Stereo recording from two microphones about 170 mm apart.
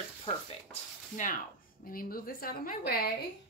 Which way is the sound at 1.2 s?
45° left (ahead or behind).